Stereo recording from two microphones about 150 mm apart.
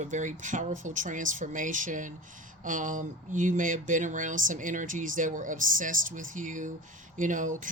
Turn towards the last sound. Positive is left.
turn(degrees=-60)  # may be behind; listen again after turning